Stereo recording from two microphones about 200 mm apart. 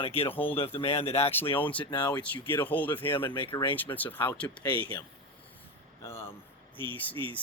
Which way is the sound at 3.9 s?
10° left (ahead or behind).